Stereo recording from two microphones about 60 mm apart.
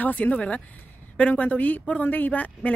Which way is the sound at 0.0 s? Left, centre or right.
Left.